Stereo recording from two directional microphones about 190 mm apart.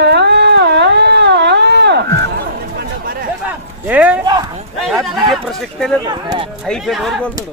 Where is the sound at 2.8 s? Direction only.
50° right (ahead or behind).